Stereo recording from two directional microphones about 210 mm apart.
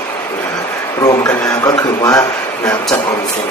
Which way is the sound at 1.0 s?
15° left (ahead or behind).